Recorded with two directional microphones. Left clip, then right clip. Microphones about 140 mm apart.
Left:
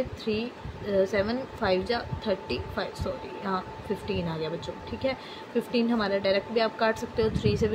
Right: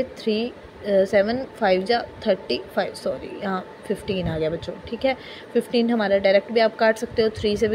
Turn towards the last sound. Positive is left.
turn(degrees=-40)  # may be behind; listen again after turning